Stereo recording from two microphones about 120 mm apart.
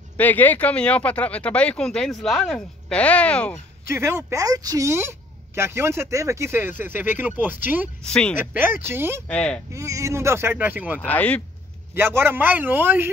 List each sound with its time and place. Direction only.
0.2 s speech: 15° left (ahead or behind)
3.9 s a woman's voice: 20° right (ahead or behind)
8.0 s speech: 10° left (ahead or behind)
8.4 s a woman's voice: 15° right (ahead or behind)
9.3 s speech: 10° left (ahead or behind)
9.7 s a woman's voice: 25° right (ahead or behind)
11.0 s speech: 10° left (ahead or behind)
11.9 s a man's voice: 20° right (ahead or behind)